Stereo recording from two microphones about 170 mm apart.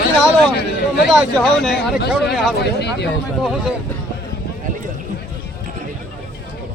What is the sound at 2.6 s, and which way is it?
Speech, 80° left.